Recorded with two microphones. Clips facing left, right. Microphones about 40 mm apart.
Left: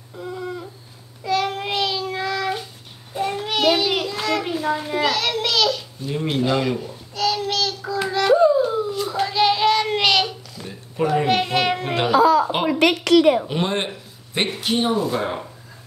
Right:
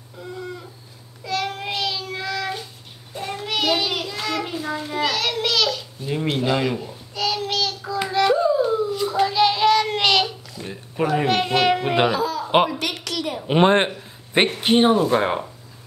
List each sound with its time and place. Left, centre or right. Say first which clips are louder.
0.2 s a sound: left 3 dB; centre
1.2 s child singing: left 4 dB; centre
3.4 s a sound: left 2 dB; centre
6.2 s babbling: left 1 dB; centre
8.4 s child singing: left 2 dB; centre
10.6 s a sound: left 1 dB; centre
11.2 s music: right 1 dB; centre
12.6 s a woman's voice: left 8 dB; left
13.5 s speech: right 7 dB; right